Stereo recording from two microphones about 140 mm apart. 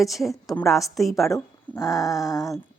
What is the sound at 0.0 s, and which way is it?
A woman's voice, centre (ahead or behind).